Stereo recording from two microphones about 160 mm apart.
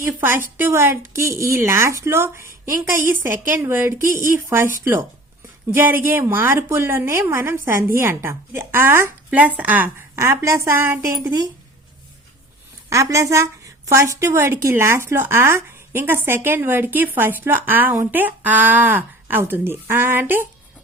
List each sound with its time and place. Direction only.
0.0 s a woman's voice: 15° right (ahead or behind)
12.9 s a woman's voice: 20° right (ahead or behind)